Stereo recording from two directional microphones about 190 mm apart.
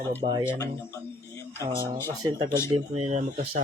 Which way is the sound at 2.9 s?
35° right (ahead or behind).